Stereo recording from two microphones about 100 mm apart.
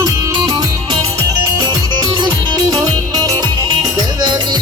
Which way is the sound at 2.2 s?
40° right (ahead or behind).